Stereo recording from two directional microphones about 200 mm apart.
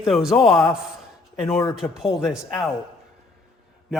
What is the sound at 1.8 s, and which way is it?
Speech, centre (ahead or behind).